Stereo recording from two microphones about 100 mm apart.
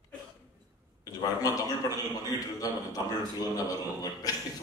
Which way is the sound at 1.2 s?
35° left (ahead or behind).